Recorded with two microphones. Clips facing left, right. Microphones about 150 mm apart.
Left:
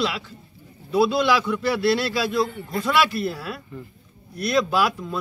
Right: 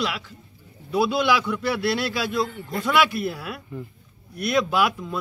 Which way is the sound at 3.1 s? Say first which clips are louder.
Left 1 dB; 15° right (ahead or behind).